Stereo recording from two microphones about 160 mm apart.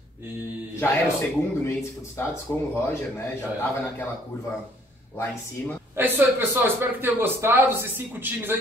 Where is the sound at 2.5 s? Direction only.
15° left (ahead or behind).